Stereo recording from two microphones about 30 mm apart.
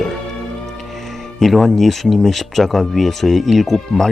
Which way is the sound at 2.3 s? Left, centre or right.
Centre.